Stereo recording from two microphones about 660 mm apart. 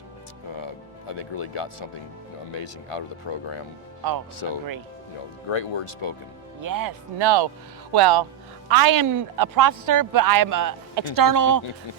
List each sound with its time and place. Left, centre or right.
0.5 s speech: left
6.7 s a man's voice: right